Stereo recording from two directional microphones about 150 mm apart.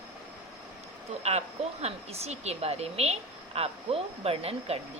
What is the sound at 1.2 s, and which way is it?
Speech, 45° right (ahead or behind).